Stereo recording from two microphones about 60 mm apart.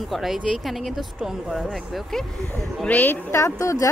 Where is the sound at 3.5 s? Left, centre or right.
Left.